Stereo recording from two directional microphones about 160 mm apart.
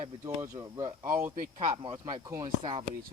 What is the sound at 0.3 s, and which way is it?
Speech, 20° right (ahead or behind).